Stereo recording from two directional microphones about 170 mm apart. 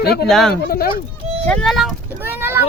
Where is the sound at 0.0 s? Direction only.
70° left (ahead or behind).